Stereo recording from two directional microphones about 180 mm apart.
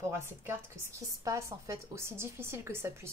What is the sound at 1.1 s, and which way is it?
A woman's voice, 15° right (ahead or behind).